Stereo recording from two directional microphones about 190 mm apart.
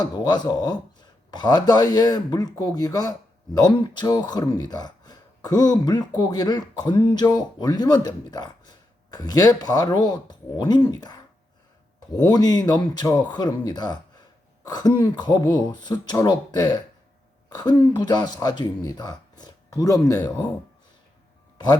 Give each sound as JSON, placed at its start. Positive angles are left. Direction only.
{"t": 0.0, "sound": "speech", "side_deg": 20}
{"t": 12.3, "sound": "speech", "side_deg": 20}